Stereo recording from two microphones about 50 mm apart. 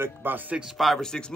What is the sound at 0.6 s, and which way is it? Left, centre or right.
Speech, centre.